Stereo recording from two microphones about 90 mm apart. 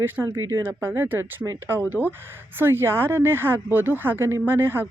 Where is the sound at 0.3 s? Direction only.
25° right (ahead or behind).